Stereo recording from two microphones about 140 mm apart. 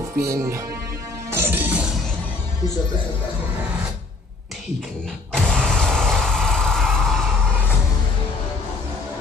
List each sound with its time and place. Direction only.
0.1 s speech: 20° right (ahead or behind)
1.3 s music: 15° right (ahead or behind)
5.3 s vehicle: 5° left (ahead or behind)